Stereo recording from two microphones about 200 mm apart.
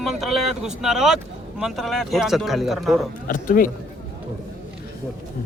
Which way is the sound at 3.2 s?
45° left (ahead or behind).